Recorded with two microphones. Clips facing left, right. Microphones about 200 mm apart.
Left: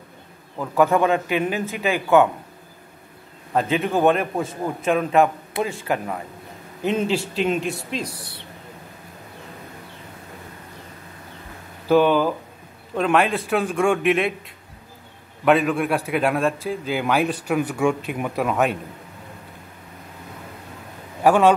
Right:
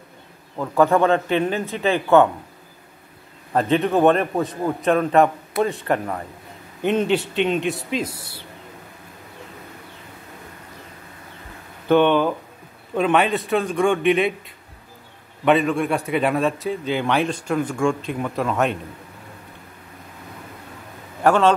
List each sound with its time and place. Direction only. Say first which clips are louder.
0.7 s a man's voice: right 1 dB; 10° left (ahead or behind)
3.7 s a man's voice: right 3 dB; centre (ahead or behind)
11.9 s a man's voice: right 1 dB; 5° left (ahead or behind)
15.4 s a man's voice: even; centre (ahead or behind)
21.2 s a man's voice: left 1 dB; 10° left (ahead or behind)